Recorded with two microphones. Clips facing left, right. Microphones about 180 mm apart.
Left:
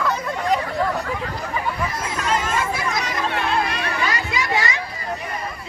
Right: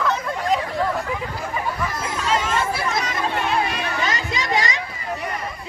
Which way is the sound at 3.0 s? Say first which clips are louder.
Even; centre (ahead or behind).